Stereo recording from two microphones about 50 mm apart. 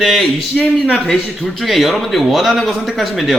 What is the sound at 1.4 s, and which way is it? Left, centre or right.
A man's voice, centre.